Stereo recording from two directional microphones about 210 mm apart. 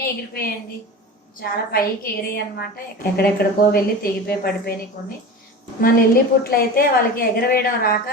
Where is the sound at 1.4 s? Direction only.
45° left (ahead or behind).